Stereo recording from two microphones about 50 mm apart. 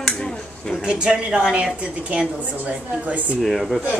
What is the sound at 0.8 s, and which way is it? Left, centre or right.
A woman's voice, centre.